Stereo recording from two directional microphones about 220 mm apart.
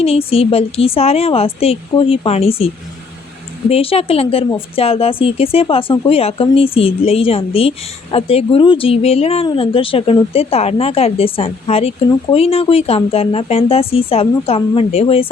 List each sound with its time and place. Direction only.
0.0 s speech: 25° left (ahead or behind)